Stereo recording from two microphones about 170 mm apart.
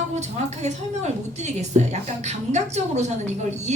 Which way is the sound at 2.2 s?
40° right (ahead or behind).